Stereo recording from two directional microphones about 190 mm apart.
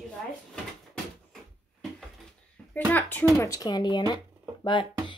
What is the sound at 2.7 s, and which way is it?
Speech, 10° left (ahead or behind).